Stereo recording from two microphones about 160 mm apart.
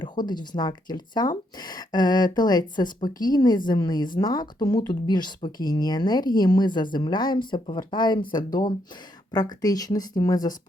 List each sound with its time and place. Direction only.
0.0 s a woman's voice: 25° left (ahead or behind)